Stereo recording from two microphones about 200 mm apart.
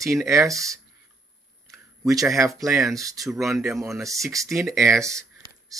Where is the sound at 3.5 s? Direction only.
Centre (ahead or behind).